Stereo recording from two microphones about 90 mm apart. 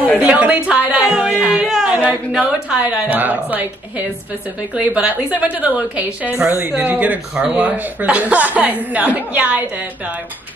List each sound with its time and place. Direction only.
0.2 s speech: 15° right (ahead or behind)